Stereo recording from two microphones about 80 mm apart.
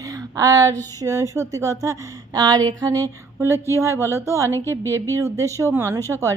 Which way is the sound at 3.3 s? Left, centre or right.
Right.